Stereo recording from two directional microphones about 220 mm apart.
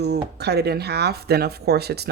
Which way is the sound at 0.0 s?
50° right (ahead or behind).